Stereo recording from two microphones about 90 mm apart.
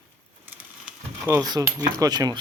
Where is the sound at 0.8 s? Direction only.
20° right (ahead or behind).